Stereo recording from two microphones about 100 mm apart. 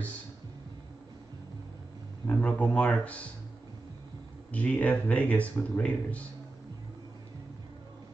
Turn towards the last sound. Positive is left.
turn(degrees=15)  # may be behind; listen again after turning